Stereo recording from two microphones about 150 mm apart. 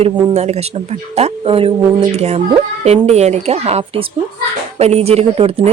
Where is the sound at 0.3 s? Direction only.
45° right (ahead or behind).